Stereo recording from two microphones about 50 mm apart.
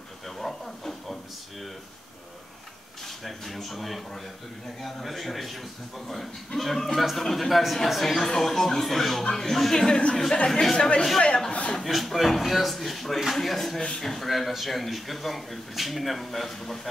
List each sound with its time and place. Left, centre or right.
0.4 s a sound: centre
3.3 s speech: centre
11.2 s speech: centre
11.7 s speech: centre